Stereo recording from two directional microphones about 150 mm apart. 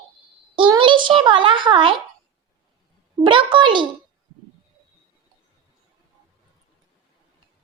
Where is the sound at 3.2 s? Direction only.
35° right (ahead or behind).